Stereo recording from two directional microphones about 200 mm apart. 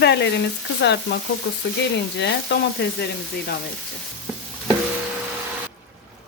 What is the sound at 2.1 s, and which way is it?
Speech, 60° left (ahead or behind).